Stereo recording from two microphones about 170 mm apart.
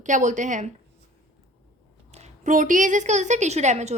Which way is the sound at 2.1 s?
45° right (ahead or behind).